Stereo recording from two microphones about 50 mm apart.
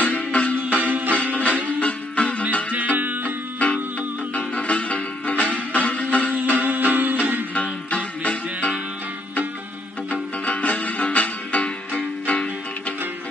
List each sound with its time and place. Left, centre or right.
0.0 s music: left
0.6 s music: right
1.1 s music: left
2.7 s music: right
4.3 s music: left
6.3 s music: right
7.5 s music: left
10.0 s music: left